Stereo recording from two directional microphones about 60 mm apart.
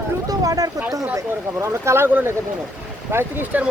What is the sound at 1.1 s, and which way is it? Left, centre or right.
Speech, right.